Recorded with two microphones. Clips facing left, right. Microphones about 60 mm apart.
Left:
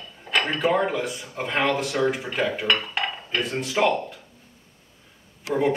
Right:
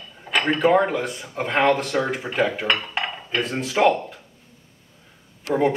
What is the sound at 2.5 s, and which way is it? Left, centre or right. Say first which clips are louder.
Dishes: even; centre.